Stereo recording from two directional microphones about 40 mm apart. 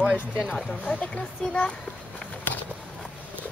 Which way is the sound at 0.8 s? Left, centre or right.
Left.